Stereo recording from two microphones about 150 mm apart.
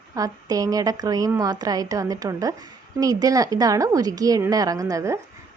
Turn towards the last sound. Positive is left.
turn(degrees=-20)  # may be behind; listen again after turning